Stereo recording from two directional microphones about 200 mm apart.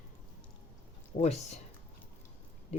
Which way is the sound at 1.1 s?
35° left (ahead or behind).